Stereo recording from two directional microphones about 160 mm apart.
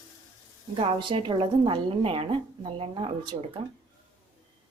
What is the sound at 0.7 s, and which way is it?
A woman's voice, 35° right (ahead or behind).